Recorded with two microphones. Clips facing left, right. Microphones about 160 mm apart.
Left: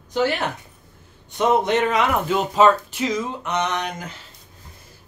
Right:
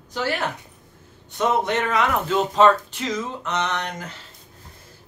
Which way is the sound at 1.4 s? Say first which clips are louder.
Left 3 dB; 15° left (ahead or behind).